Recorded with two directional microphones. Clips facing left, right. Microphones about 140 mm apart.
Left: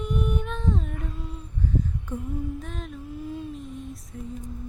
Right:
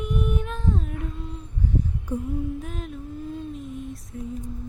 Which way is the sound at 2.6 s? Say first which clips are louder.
Right 2 dB; centre (ahead or behind).